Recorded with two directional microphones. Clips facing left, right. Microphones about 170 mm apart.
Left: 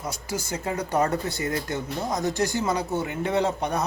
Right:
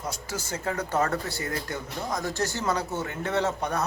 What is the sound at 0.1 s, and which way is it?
Speech, 10° left (ahead or behind).